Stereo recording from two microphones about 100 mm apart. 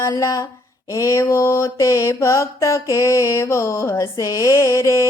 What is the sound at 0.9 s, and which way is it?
Mantra, 30° left (ahead or behind).